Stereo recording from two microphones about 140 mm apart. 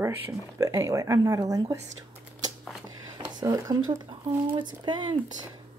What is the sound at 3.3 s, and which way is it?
Speech, 30° right (ahead or behind).